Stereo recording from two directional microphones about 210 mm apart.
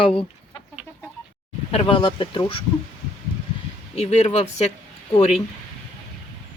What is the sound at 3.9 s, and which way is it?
Speech, 30° left (ahead or behind).